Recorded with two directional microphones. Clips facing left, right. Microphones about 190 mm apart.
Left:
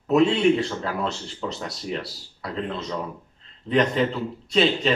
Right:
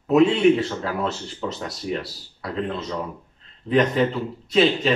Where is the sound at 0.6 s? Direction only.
5° right (ahead or behind).